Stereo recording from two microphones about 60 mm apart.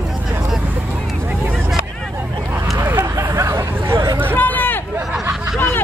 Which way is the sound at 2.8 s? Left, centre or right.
Right.